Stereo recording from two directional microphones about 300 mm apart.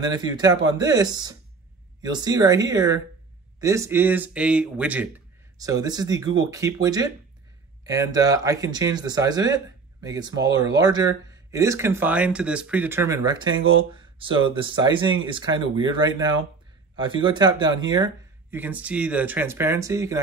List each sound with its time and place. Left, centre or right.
0.0 s speech: centre